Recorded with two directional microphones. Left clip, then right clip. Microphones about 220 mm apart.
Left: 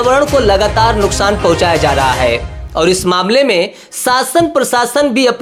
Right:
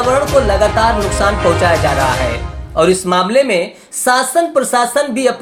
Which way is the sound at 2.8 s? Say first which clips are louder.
Even; 45° left (ahead or behind).